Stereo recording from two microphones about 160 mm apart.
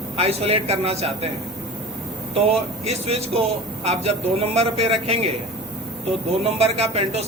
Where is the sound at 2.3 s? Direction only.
40° right (ahead or behind).